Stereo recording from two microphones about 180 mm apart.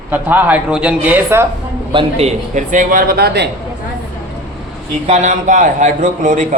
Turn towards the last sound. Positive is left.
turn(degrees=-40)  # may be behind; listen again after turning